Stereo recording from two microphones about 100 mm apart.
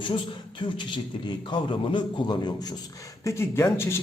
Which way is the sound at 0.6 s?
55° left (ahead or behind).